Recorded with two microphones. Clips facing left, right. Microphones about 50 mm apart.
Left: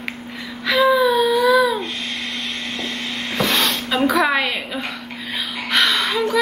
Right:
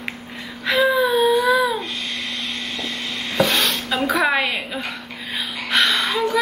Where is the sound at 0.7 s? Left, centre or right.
Right.